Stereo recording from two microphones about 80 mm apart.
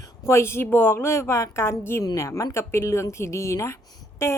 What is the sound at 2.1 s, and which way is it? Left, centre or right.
A woman's voice, left.